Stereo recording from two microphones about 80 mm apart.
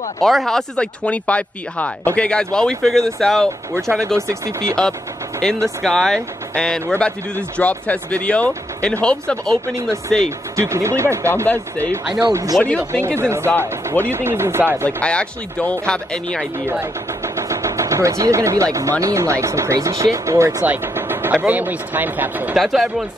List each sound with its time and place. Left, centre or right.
0.2 s speech: centre
10.5 s speech: right
11.4 s speech: left
12.1 s speech: right
12.6 s speech: centre
13.0 s speech: right
14.9 s speech: centre
17.2 s speech: right
20.6 s speech: right
22.6 s speech: centre